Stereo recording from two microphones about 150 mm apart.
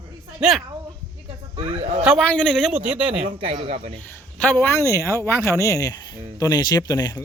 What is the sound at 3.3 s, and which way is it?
Speech, 40° right (ahead or behind).